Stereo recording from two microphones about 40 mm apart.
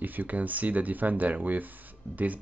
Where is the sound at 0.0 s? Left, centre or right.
Right.